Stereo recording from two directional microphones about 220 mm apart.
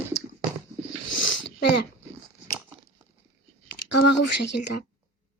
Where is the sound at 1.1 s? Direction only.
55° left (ahead or behind).